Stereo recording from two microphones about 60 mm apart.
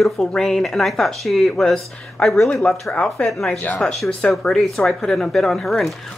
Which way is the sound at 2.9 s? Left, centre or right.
Centre.